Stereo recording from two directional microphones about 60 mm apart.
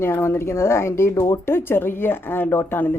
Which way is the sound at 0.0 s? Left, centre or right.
Left.